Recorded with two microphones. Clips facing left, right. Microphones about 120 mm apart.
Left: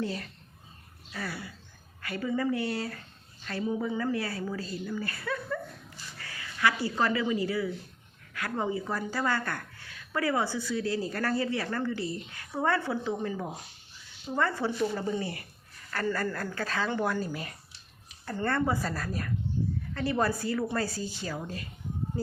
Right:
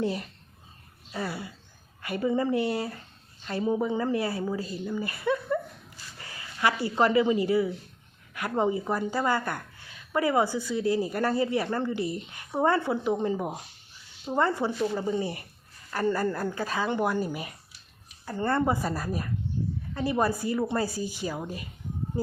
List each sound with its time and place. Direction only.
0.0 s a woman's voice: 20° right (ahead or behind)